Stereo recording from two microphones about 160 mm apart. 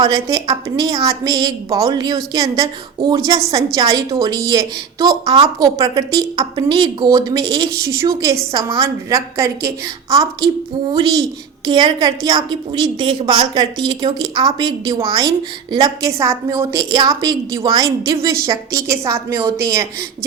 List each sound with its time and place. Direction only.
0.0 s a woman's voice: 25° right (ahead or behind)